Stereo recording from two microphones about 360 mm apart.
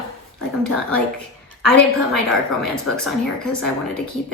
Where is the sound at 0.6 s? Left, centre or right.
Right.